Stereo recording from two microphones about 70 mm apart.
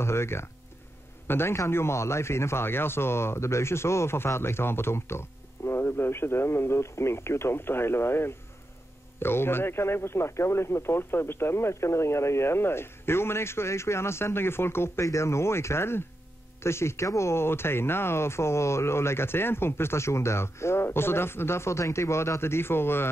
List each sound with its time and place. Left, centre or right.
0.0 s a man's voice: left